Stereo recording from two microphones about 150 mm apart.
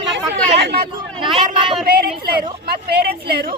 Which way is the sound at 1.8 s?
80° right.